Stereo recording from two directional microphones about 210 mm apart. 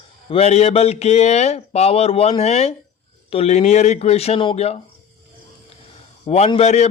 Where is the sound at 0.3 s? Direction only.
30° left (ahead or behind).